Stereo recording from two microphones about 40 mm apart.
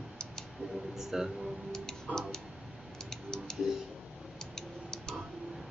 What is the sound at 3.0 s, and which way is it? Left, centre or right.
Typing, centre.